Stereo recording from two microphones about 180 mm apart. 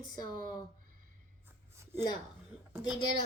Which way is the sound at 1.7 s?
15° right (ahead or behind).